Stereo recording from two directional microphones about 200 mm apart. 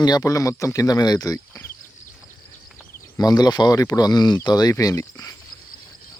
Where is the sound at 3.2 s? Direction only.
20° left (ahead or behind).